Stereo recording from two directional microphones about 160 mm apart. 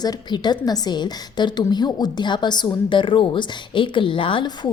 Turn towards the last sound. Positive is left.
turn(degrees=30)  # may be behind; listen again after turning